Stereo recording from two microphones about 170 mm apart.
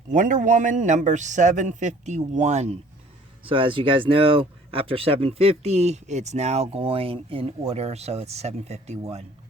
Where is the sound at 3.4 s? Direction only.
30° right (ahead or behind).